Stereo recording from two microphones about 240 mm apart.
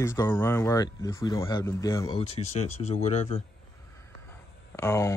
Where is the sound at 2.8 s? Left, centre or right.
Left.